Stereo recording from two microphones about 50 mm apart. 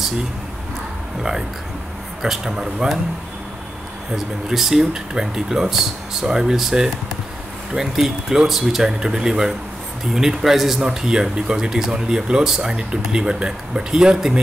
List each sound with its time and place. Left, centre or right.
2.2 s speech: centre
4.1 s speech: centre